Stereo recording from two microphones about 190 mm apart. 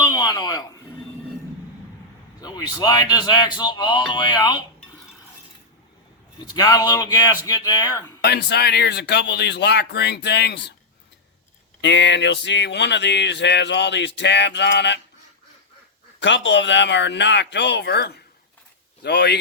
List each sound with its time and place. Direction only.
0.0 s a sound: 20° left (ahead or behind)
2.4 s speech: 20° left (ahead or behind)
6.4 s speech: 20° left (ahead or behind)
8.2 s speech: 60° left (ahead or behind)
11.8 s speech: 70° left (ahead or behind)
16.2 s speech: 70° left (ahead or behind)